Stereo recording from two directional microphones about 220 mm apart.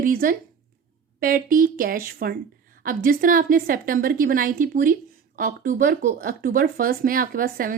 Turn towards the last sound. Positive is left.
turn(degrees=-40)  # may be behind; listen again after turning